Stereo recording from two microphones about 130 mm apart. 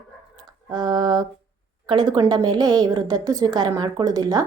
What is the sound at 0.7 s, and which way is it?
A woman's voice, 30° right (ahead or behind).